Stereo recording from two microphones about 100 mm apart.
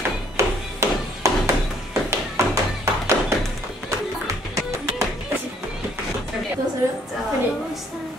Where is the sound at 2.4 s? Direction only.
30° right (ahead or behind).